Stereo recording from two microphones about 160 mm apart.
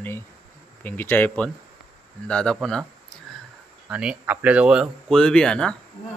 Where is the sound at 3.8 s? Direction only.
5° right (ahead or behind).